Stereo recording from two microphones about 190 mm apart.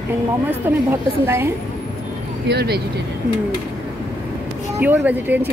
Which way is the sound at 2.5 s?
55° right (ahead or behind).